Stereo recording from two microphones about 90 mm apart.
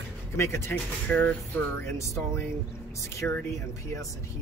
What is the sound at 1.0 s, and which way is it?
Speech, 15° left (ahead or behind).